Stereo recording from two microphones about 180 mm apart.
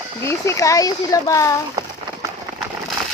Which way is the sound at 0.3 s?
15° left (ahead or behind).